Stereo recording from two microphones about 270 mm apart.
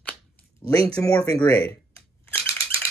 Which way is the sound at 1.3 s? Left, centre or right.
Centre.